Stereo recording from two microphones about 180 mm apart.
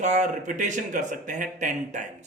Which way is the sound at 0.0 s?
40° right (ahead or behind).